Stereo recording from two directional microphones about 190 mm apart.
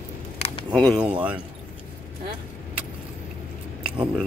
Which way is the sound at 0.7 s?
Centre (ahead or behind).